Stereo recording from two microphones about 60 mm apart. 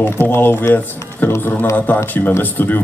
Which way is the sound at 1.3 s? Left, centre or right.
Left.